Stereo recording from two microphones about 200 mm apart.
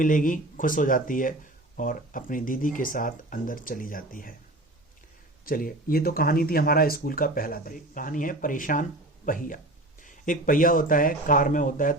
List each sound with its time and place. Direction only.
0.0 s speech: 40° left (ahead or behind)
5.5 s speech: 45° left (ahead or behind)